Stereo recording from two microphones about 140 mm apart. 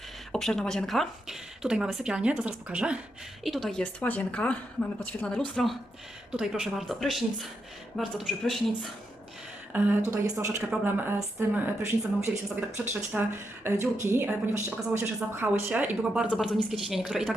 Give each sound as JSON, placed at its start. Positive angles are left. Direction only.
{"t": 0.3, "sound": "a woman's voice", "side_deg": 5}
{"t": 9.7, "sound": "a woman's voice", "side_deg": -10}